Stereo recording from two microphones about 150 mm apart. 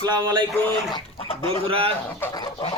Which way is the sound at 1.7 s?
40° right (ahead or behind).